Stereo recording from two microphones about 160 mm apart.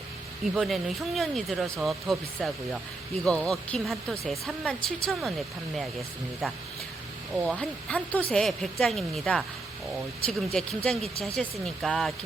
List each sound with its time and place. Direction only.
0.5 s speech: centre (ahead or behind)
6.4 s speech: centre (ahead or behind)
7.6 s speech: 5° left (ahead or behind)